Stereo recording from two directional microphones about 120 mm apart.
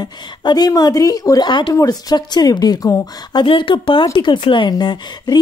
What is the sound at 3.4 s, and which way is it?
Speech, 45° left (ahead or behind).